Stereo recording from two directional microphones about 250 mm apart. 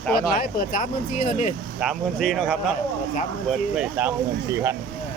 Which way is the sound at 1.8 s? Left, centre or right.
Centre.